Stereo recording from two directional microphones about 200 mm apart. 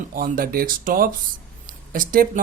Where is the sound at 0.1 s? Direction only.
45° right (ahead or behind).